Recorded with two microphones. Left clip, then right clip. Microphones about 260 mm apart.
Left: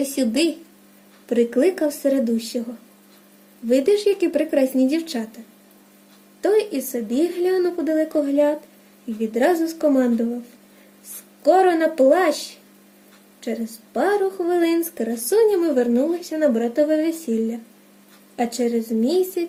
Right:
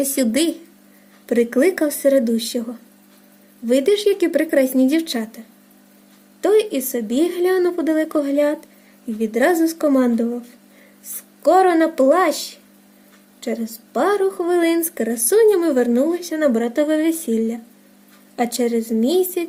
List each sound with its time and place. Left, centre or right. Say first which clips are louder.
0.0 s speech: right 2 dB; right
3.7 s speech: right 1 dB; right
6.4 s speech: right 3 dB; right
11.4 s speech: right 2 dB; right